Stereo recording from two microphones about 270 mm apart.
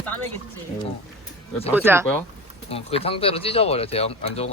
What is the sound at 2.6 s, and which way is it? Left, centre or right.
Speech, left.